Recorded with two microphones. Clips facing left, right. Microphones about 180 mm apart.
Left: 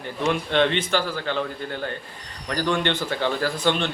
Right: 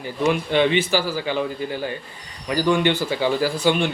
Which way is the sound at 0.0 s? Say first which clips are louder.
Right 3 dB; 5° right (ahead or behind).